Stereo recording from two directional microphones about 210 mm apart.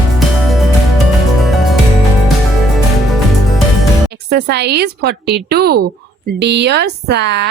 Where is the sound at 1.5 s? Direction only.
Centre (ahead or behind).